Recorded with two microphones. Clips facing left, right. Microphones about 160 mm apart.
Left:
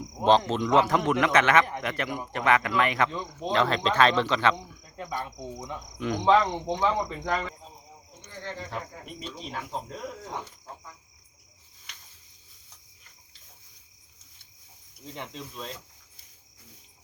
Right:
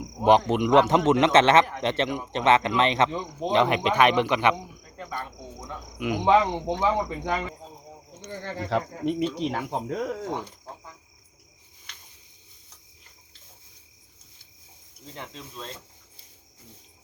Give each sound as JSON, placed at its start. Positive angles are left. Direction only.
{"t": 0.3, "sound": "speech", "side_deg": -15}
{"t": 4.9, "sound": "cricket", "side_deg": 5}
{"t": 6.0, "sound": "speech", "side_deg": -10}
{"t": 6.8, "sound": "speech", "side_deg": -5}
{"t": 8.2, "sound": "speech", "side_deg": -90}
{"t": 15.1, "sound": "speech", "side_deg": 0}